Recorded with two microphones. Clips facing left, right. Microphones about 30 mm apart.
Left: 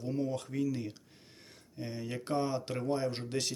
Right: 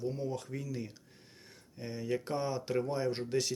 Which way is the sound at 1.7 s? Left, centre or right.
Left.